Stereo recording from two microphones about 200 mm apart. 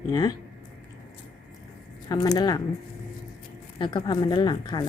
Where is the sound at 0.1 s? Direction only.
20° left (ahead or behind).